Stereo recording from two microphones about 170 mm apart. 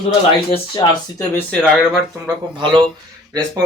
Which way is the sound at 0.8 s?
30° left (ahead or behind).